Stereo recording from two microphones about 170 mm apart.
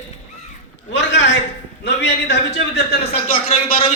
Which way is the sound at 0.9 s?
90° left.